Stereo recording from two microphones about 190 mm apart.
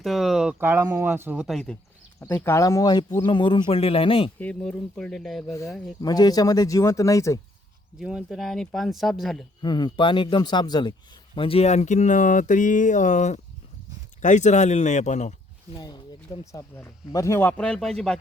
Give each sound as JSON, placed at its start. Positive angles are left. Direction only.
{"t": 0.0, "sound": "speech", "side_deg": 0}
{"t": 2.2, "sound": "a man's voice", "side_deg": 10}
{"t": 4.4, "sound": "speech", "side_deg": 10}
{"t": 5.5, "sound": "speech", "side_deg": 15}
{"t": 7.9, "sound": "speech", "side_deg": -5}
{"t": 9.6, "sound": "a man's voice", "side_deg": 25}
{"t": 15.8, "sound": "speech", "side_deg": 20}